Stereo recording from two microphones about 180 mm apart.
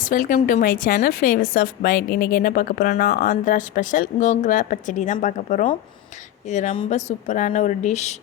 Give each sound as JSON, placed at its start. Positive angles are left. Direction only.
{"t": 0.0, "sound": "a woman's voice", "side_deg": 50}